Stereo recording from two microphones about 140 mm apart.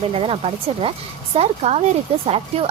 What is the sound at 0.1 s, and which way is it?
A woman's voice, 40° right (ahead or behind).